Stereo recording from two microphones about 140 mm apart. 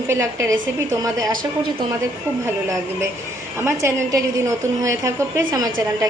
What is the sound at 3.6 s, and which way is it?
A woman's voice, 20° right (ahead or behind).